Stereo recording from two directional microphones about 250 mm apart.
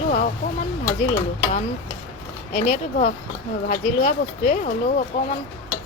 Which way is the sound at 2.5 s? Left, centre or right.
Left.